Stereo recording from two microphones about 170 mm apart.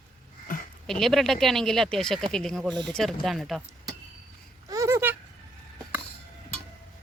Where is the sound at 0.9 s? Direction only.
Centre (ahead or behind).